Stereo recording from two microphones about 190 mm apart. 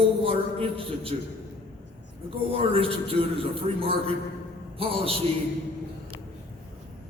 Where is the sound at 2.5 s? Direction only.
30° right (ahead or behind).